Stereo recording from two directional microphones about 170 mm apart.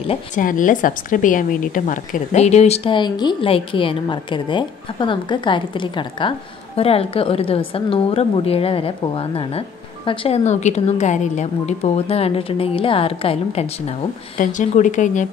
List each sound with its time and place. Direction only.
0.3 s a woman's voice: 50° left (ahead or behind)